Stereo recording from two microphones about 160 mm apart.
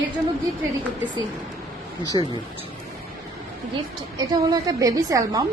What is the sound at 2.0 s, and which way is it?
Speech, 25° left (ahead or behind).